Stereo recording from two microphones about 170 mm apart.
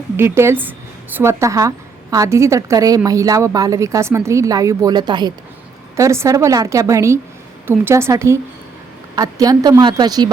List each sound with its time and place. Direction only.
0.2 s a woman's voice: 15° right (ahead or behind)